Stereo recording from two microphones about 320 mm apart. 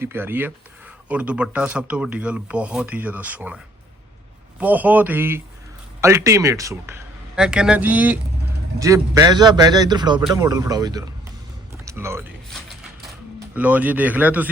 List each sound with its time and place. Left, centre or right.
0.0 s speech: centre
4.6 s speech: centre
13.5 s speech: centre